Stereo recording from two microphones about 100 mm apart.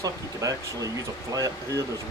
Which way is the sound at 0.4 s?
30° right (ahead or behind).